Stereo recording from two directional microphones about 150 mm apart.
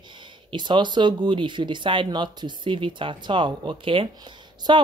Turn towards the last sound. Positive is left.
turn(degrees=-30)  # may be behind; listen again after turning